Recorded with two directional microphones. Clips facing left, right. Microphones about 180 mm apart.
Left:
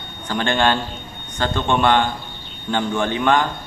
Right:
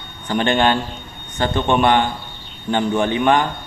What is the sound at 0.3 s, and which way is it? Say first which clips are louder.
A man's voice: right 2 dB; 15° right (ahead or behind).